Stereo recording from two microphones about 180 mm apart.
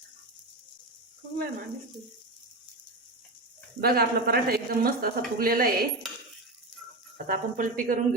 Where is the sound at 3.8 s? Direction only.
60° right (ahead or behind).